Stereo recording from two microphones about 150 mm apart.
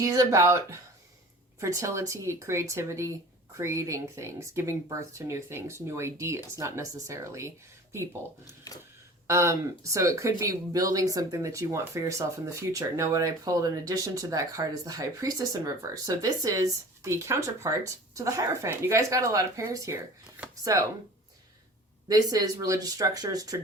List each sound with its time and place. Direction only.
0.0 s speech: 20° right (ahead or behind)
8.4 s speech: 25° left (ahead or behind)
9.2 s speech: 20° right (ahead or behind)
22.1 s speech: 25° right (ahead or behind)